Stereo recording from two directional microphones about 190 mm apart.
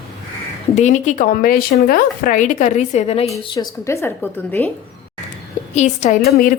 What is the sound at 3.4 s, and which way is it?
Speech, 20° left (ahead or behind).